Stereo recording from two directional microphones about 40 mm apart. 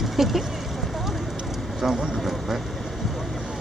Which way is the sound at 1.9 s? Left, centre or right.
Right.